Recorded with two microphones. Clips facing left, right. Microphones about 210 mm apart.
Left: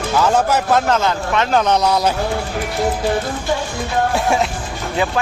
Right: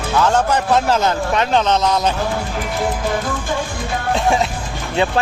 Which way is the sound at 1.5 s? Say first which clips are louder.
Left 2 dB; 5° left (ahead or behind).